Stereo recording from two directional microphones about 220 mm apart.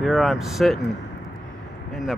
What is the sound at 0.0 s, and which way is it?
Speech, centre (ahead or behind).